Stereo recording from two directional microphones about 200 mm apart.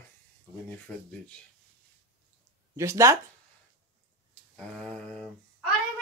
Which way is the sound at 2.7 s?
15° right (ahead or behind).